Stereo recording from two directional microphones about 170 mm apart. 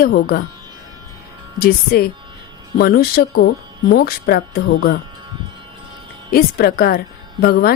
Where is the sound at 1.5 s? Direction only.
60° left (ahead or behind).